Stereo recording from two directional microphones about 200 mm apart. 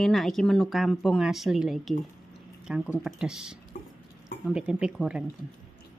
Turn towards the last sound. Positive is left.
turn(degrees=-5)  # may be behind; listen again after turning